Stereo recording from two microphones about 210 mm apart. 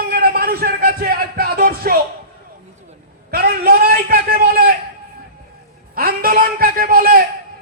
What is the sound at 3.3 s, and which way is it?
A man's voice, 45° right (ahead or behind).